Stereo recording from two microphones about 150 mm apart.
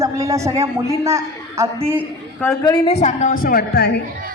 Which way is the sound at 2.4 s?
15° left (ahead or behind).